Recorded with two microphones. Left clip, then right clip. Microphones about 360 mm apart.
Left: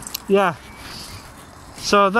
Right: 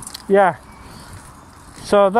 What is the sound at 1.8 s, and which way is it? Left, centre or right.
Speech, centre.